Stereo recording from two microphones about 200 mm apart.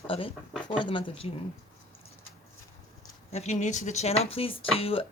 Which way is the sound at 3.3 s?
35° left (ahead or behind).